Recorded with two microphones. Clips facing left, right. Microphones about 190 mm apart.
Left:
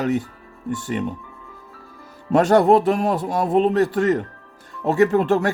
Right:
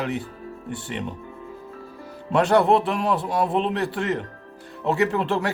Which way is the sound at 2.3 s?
45° left (ahead or behind).